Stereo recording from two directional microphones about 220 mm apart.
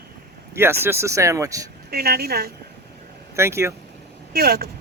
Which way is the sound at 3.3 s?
10° right (ahead or behind).